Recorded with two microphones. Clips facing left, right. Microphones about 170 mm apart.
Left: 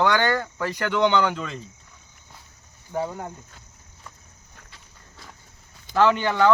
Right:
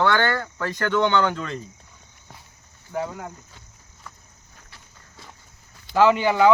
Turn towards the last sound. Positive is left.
turn(degrees=-5)  # may be behind; listen again after turning